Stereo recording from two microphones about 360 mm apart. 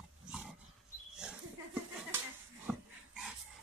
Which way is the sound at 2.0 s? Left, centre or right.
Centre.